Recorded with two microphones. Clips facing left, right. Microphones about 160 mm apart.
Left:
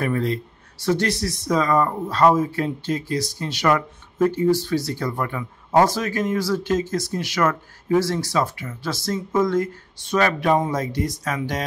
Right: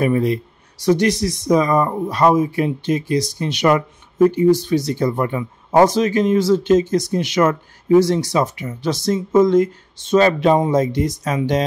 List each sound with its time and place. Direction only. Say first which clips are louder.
0.0 s speech: right 6 dB; 15° right (ahead or behind)